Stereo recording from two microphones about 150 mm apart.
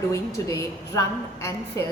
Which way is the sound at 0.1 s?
20° left (ahead or behind).